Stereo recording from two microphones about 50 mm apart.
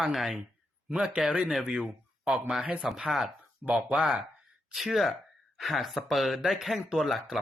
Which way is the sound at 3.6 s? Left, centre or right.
Right.